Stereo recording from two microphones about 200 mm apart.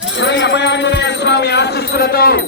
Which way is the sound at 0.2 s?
60° left (ahead or behind).